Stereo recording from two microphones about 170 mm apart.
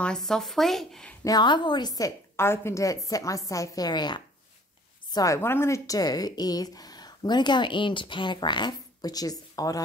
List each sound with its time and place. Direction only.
0.0 s speech: 5° left (ahead or behind)
1.2 s a woman's voice: 25° left (ahead or behind)